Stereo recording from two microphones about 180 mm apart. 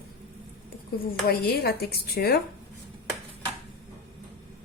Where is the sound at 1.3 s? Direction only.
60° left (ahead or behind).